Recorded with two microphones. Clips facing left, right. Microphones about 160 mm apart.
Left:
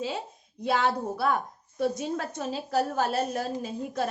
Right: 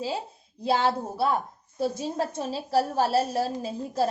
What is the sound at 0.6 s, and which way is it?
A woman's voice, 30° right (ahead or behind).